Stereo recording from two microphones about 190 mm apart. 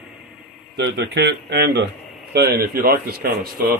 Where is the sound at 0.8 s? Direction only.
65° right (ahead or behind).